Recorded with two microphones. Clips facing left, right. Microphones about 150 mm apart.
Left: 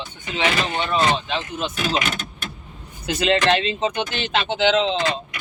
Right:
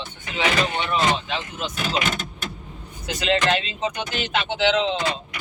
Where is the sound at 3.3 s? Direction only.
25° left (ahead or behind).